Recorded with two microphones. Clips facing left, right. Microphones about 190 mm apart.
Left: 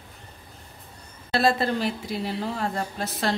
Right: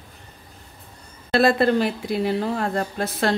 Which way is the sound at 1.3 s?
55° right (ahead or behind).